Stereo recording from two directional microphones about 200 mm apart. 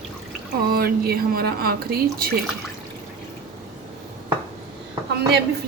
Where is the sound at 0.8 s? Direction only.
50° right (ahead or behind).